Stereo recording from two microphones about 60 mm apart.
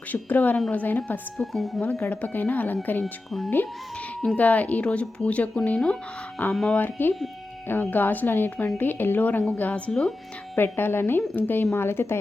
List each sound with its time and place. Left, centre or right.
0.1 s a woman's voice: left
1.4 s speech: centre
1.8 s a woman's voice: left
3.0 s speech: centre
4.4 s speech: left
6.4 s a woman's voice: left; by 10.1 s centre
10.5 s a woman's voice: left